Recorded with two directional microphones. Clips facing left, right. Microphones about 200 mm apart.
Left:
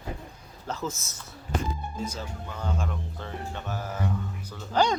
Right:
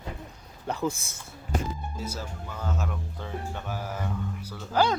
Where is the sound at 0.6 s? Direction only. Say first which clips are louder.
Right 4 dB; 15° right (ahead or behind).